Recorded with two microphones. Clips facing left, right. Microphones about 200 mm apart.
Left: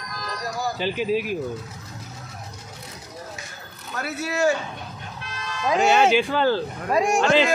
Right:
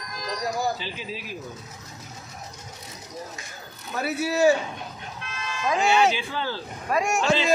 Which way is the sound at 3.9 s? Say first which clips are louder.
Right 2 dB; 10° right (ahead or behind).